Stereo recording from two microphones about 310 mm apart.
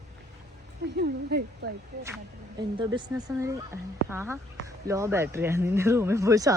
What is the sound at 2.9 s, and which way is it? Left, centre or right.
Speech, centre.